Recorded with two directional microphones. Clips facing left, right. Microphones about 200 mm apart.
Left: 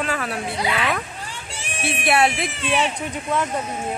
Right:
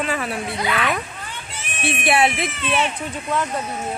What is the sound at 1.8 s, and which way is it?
Speech, centre (ahead or behind).